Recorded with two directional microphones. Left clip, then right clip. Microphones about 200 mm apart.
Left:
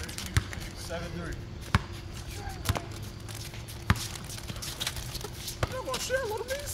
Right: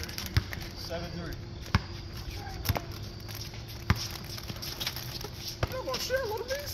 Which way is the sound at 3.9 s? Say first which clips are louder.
Left 2 dB; 25° left (ahead or behind).